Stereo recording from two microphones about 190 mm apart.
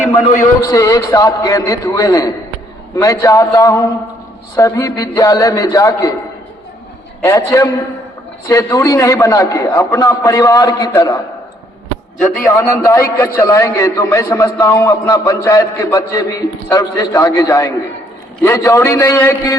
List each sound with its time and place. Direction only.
0.6 s a man's voice: 15° left (ahead or behind)
7.2 s a man's voice: 15° left (ahead or behind)
12.5 s a man's voice: 15° left (ahead or behind)